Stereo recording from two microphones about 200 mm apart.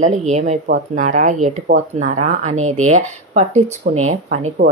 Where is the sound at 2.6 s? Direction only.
90° right.